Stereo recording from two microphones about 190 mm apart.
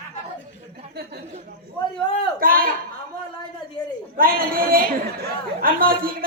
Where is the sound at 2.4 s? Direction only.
50° right (ahead or behind).